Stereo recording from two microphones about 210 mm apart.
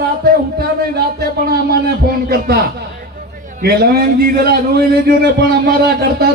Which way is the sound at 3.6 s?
50° right (ahead or behind).